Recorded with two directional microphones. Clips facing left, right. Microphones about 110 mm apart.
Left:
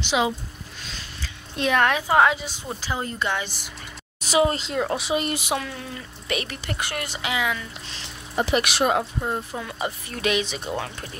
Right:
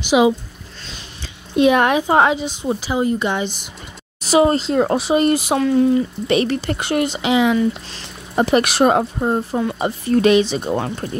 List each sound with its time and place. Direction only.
0.0 s speech: 10° right (ahead or behind)
4.2 s speech: 40° right (ahead or behind)
7.9 s speech: 45° right (ahead or behind)